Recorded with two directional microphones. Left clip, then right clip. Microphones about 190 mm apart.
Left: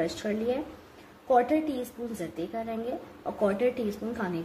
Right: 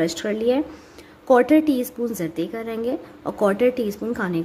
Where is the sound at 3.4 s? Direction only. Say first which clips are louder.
Right 8 dB; 45° right (ahead or behind).